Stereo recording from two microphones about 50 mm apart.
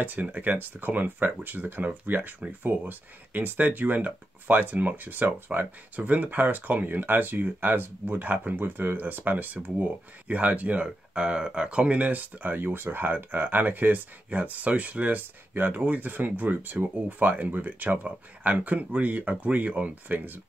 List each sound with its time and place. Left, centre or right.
0.0 s speech: right